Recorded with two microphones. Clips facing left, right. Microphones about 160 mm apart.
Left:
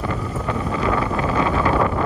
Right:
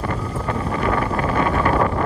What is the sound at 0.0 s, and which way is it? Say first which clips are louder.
Wind noise: even; 40° right (ahead or behind).